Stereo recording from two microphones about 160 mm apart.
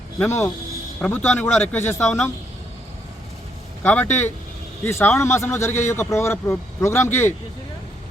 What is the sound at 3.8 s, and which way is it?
Speech, 10° left (ahead or behind).